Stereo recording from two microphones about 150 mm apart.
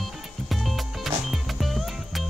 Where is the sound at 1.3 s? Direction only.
Centre (ahead or behind).